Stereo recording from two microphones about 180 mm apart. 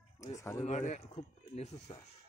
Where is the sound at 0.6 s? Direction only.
40° left (ahead or behind).